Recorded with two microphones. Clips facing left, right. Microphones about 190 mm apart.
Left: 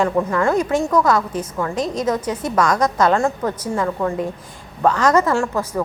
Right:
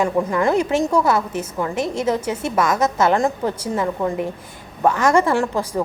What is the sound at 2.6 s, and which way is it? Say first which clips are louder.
A woman's voice: left 1 dB; 25° right (ahead or behind).